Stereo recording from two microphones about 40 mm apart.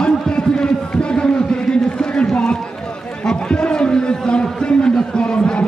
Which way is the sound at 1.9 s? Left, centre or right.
Left.